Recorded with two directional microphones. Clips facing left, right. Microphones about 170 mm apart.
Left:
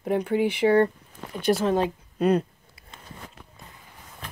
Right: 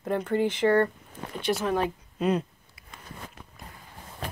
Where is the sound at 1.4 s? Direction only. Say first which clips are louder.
Left 4 dB; 30° left (ahead or behind).